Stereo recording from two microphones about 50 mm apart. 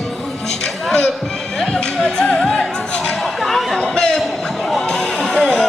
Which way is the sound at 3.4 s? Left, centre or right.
Centre.